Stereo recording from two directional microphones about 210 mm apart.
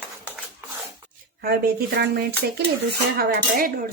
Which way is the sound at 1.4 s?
45° right (ahead or behind).